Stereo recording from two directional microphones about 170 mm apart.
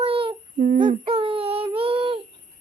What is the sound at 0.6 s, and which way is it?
Speech, 50° right (ahead or behind).